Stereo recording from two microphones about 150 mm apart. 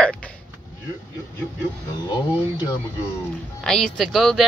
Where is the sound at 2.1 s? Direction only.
25° left (ahead or behind).